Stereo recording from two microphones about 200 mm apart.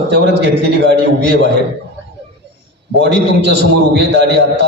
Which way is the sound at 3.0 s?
60° right (ahead or behind).